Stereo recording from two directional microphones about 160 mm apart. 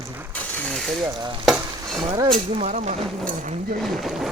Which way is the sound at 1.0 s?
25° right (ahead or behind).